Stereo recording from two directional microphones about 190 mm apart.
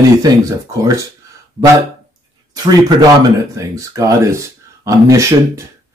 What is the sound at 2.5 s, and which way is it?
Speech, 20° right (ahead or behind).